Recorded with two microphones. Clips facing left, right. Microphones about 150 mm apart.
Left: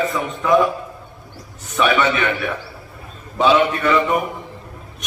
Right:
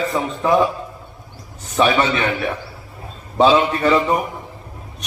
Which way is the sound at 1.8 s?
30° right (ahead or behind).